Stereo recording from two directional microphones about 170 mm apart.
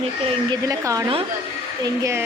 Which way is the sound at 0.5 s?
20° right (ahead or behind).